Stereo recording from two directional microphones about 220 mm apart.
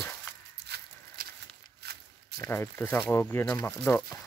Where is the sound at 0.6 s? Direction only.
50° right (ahead or behind).